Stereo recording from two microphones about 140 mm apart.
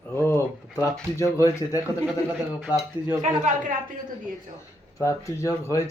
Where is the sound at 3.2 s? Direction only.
60° right (ahead or behind).